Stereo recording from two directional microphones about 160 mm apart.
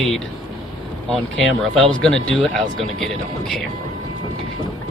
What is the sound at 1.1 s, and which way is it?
Speech, centre (ahead or behind).